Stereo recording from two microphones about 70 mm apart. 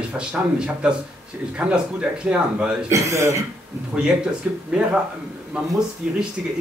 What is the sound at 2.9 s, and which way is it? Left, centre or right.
Speech, right.